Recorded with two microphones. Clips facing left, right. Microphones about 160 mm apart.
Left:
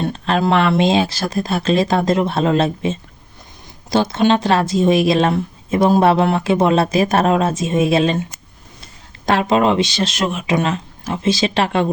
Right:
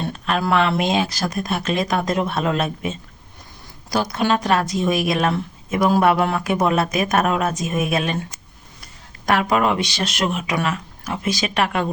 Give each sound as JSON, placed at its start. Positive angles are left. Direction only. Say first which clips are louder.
{"t": 0.1, "sound": "speech", "louder": "left 2 dB", "side_deg": 30}